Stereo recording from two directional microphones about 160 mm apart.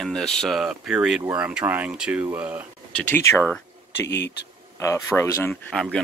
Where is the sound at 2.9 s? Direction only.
10° left (ahead or behind).